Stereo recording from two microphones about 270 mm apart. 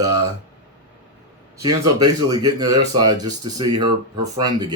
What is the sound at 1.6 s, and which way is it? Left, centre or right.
Speech, centre.